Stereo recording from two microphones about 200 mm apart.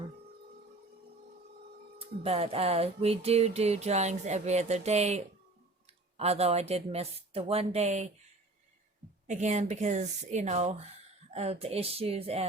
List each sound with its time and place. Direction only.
2.0 s music: 30° right (ahead or behind)
9.2 s music: 35° right (ahead or behind)